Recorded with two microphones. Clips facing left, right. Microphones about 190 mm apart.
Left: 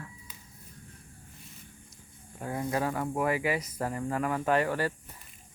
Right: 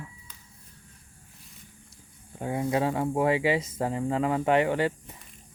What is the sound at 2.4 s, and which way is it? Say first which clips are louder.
Speech: right 4 dB; 20° right (ahead or behind).